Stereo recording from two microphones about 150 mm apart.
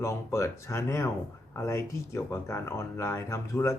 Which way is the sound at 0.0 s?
20° left (ahead or behind).